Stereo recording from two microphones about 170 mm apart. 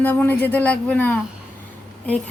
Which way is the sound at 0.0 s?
10° left (ahead or behind).